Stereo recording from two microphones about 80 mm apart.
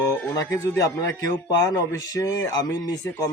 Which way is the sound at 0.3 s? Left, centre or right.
Left.